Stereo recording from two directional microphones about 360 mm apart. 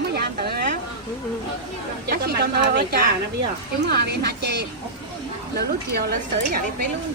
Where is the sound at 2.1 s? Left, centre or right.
Right.